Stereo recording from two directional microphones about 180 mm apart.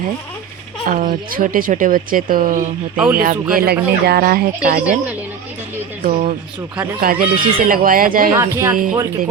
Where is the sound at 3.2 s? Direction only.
55° right (ahead or behind).